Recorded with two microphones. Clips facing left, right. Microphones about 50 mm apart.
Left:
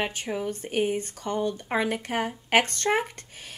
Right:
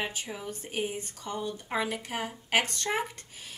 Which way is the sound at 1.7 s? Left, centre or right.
Left.